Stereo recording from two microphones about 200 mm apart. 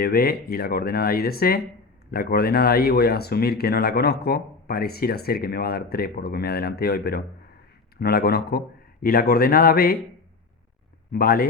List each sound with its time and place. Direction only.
0.0 s speech: 50° left (ahead or behind)
11.1 s speech: 50° left (ahead or behind)